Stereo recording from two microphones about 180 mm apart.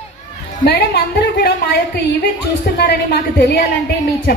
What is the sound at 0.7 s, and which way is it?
A woman's voice, 65° left (ahead or behind).